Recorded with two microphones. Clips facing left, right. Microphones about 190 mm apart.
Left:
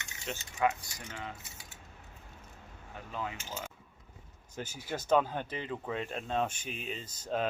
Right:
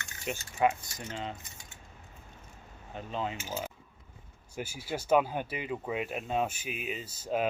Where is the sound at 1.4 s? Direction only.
5° left (ahead or behind).